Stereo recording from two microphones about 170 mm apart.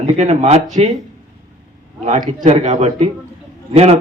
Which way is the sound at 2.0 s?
40° right (ahead or behind).